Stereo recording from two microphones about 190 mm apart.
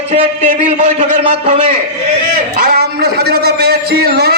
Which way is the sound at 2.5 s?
50° right (ahead or behind).